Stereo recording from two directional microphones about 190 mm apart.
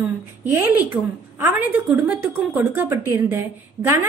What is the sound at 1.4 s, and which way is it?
A woman's voice, 10° right (ahead or behind).